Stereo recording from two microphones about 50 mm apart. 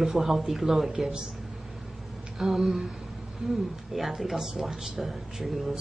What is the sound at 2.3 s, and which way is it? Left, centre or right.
Speech, centre.